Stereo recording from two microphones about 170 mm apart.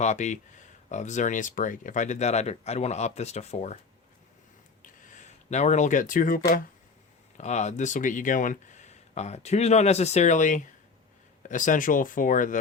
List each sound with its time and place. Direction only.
0.0 s speech: 45° left (ahead or behind)
5.1 s speech: 40° left (ahead or behind)
7.3 s speech: 40° left (ahead or behind)